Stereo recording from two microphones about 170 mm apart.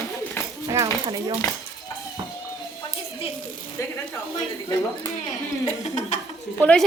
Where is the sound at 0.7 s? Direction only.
20° right (ahead or behind).